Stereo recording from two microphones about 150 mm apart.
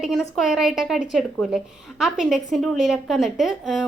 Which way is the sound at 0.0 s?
Centre (ahead or behind).